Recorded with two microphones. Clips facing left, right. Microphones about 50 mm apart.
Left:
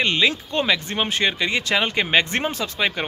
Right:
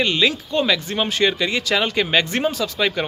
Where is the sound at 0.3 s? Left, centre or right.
Left; by 3.1 s centre.